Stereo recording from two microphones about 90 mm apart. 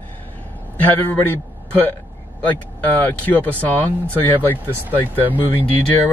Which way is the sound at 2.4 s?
20° left (ahead or behind).